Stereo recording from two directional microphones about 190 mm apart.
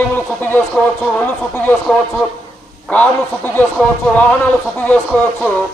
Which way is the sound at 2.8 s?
10° left (ahead or behind).